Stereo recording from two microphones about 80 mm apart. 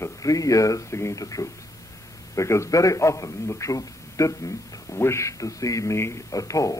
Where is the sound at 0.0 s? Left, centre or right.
Left.